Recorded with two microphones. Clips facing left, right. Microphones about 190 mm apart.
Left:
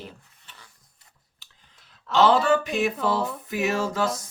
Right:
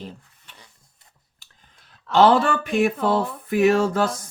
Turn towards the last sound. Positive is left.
turn(degrees=-55)  # may be behind; listen again after turning